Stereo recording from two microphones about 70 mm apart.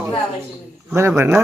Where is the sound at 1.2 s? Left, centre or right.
Right.